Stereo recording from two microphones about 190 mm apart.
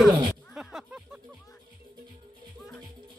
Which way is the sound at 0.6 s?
Centre (ahead or behind).